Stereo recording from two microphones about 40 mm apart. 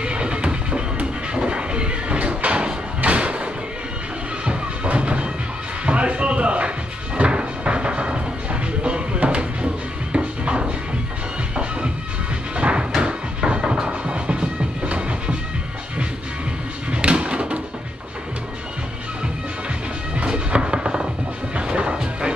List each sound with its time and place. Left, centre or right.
0.0 s music: right
4.8 s music: right
5.9 s a sound: right
7.2 s music: right
12.5 s music: right
16.9 s music: right
20.2 s music: right